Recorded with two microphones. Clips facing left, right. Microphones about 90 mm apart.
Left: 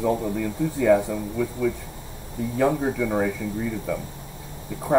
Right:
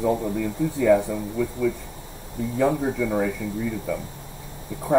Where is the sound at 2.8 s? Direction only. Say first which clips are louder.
Even; 55° left (ahead or behind).